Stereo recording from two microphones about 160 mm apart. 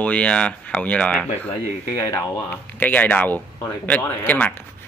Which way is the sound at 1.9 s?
20° left (ahead or behind).